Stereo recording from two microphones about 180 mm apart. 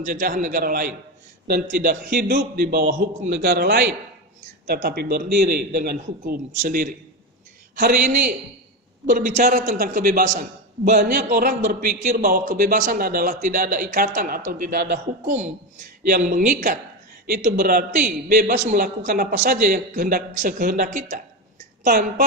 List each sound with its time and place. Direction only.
0.0 s a man's voice: 50° right (ahead or behind)
9.0 s a man's voice: 50° right (ahead or behind)
10.9 s a man's voice: 60° right (ahead or behind)
15.3 s a man's voice: 45° right (ahead or behind)
21.6 s a sound: 50° right (ahead or behind)